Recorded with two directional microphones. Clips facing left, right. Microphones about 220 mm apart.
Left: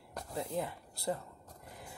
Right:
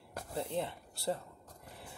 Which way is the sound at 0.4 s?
30° right (ahead or behind).